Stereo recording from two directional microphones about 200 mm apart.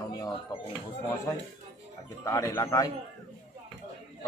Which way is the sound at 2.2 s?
15° left (ahead or behind).